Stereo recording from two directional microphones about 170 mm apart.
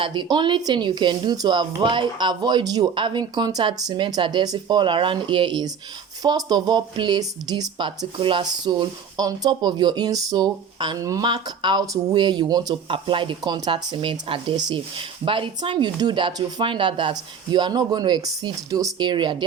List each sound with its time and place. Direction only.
0.0 s speech: 30° right (ahead or behind)